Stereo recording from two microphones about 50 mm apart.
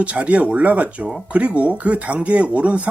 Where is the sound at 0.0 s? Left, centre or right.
Right.